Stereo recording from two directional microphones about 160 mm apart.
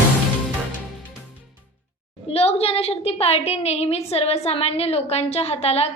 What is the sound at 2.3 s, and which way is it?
A woman's voice, 40° left (ahead or behind).